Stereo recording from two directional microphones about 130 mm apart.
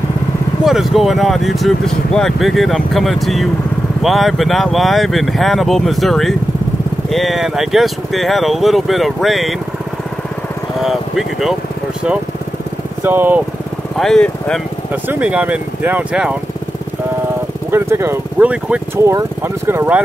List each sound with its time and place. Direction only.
0.7 s speech: centre (ahead or behind)
10.8 s speech: centre (ahead or behind)
13.0 s speech: 15° right (ahead or behind)
13.9 s speech: 5° left (ahead or behind)
15.0 s speech: 10° right (ahead or behind)
17.6 s speech: 20° right (ahead or behind)